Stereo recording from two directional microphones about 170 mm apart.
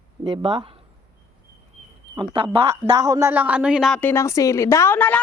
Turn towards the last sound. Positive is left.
turn(degrees=10)  # may be behind; listen again after turning